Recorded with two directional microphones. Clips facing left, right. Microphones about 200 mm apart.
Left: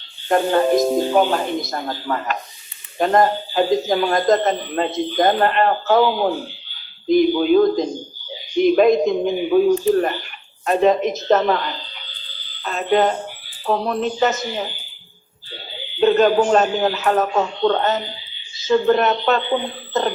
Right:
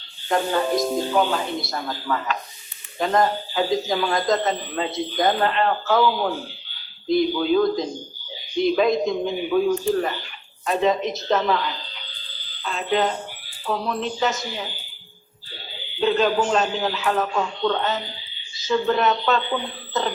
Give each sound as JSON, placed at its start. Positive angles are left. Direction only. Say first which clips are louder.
{"t": 0.3, "sound": "speech", "louder": "left 5 dB", "side_deg": 50}
{"t": 9.5, "sound": "speech", "louder": "left 5 dB", "side_deg": 30}
{"t": 10.7, "sound": "speech", "louder": "left 5 dB", "side_deg": 50}
{"t": 16.0, "sound": "speech", "louder": "left 6 dB", "side_deg": 50}
{"t": 19.9, "sound": "cough", "louder": "left 4 dB", "side_deg": 50}